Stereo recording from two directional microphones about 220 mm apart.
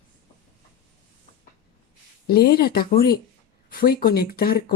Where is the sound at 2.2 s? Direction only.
45° left (ahead or behind).